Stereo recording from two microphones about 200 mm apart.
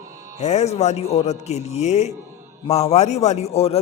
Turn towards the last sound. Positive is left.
turn(degrees=30)  # may be behind; listen again after turning